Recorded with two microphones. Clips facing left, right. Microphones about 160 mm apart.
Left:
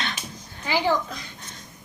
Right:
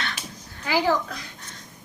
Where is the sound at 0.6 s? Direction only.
5° right (ahead or behind).